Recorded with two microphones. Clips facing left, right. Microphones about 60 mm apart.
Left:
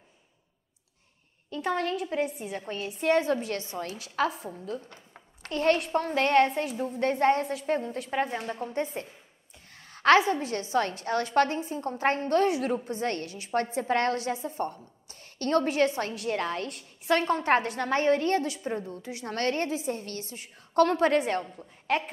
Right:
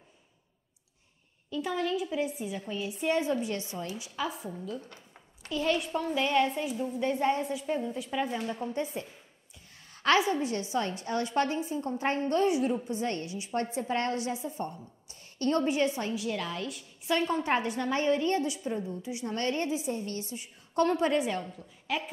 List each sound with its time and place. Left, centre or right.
1.5 s a woman's voice: left
4.2 s a woman's voice: left
5.4 s a child's voice: left
8.1 s a woman's voice: left
9.8 s a sound: left
10.4 s a woman's voice: left
18.6 s a woman's voice: left
18.9 s a woman's voice: left
21.4 s a woman's voice: left